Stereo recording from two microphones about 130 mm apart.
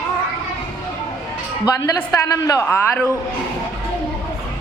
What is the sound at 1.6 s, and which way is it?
A man's voice, 25° left (ahead or behind).